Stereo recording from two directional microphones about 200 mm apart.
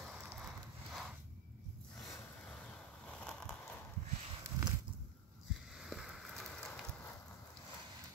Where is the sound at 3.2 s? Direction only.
5° left (ahead or behind).